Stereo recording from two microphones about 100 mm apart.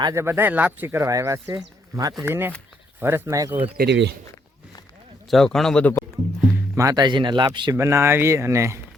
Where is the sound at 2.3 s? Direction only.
20° right (ahead or behind).